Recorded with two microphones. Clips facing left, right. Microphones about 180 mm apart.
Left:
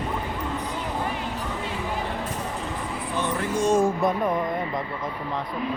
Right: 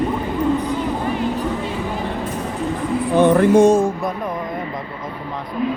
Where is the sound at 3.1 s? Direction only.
60° right (ahead or behind).